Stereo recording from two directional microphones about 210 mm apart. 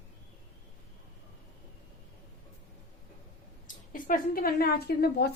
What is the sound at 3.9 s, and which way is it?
A woman's voice, 40° left (ahead or behind).